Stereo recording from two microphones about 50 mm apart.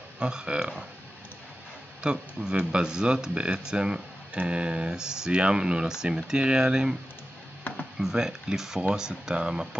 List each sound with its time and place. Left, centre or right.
0.2 s speech: centre
2.0 s speech: centre
8.0 s speech: centre